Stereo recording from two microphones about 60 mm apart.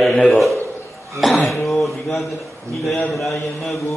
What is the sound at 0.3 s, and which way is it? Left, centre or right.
Mantra, centre.